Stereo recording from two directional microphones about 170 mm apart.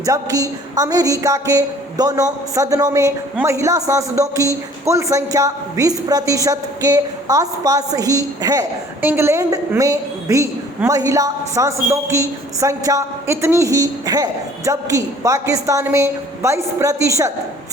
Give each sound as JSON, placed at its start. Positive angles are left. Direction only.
{"t": 0.0, "sound": "a man's voice", "side_deg": -20}